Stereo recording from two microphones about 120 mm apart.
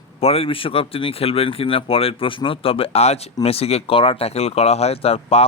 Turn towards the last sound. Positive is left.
turn(degrees=55)  # may be behind; listen again after turning